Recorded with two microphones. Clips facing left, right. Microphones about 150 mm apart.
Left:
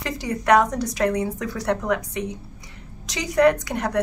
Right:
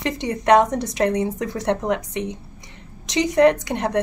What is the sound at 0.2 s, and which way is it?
A woman's voice, 20° right (ahead or behind).